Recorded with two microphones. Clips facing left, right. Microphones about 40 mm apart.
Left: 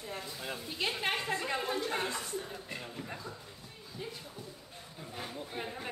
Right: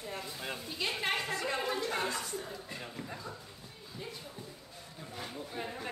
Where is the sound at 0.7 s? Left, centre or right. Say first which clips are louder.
Left 2 dB; centre.